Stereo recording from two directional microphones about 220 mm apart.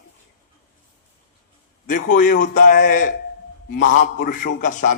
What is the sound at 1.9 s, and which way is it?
A man's voice, 35° left (ahead or behind).